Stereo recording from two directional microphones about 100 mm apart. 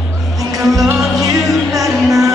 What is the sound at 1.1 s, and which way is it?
Music, 35° right (ahead or behind).